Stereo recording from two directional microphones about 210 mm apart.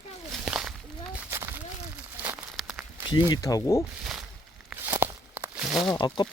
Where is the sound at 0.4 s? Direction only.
5° right (ahead or behind).